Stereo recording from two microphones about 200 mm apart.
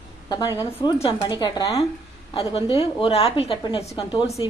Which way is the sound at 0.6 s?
20° left (ahead or behind).